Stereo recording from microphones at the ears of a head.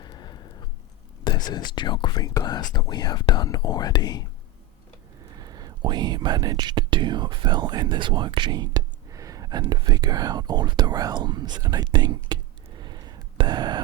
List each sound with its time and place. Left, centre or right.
0.0 s a sound: left
1.2 s speech: left
5.2 s speech: right